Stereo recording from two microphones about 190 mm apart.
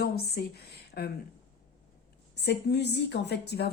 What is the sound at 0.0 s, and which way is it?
Speech, 55° left (ahead or behind).